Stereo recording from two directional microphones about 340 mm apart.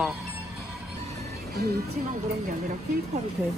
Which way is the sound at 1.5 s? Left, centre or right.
Right.